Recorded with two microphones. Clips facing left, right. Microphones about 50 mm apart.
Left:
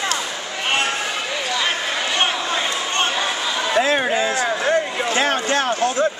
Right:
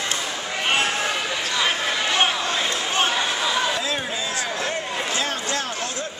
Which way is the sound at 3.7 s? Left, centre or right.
Left.